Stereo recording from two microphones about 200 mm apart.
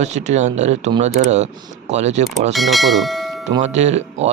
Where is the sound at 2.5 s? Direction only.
Centre (ahead or behind).